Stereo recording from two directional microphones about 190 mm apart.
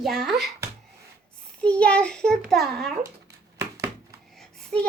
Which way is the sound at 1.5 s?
5° left (ahead or behind).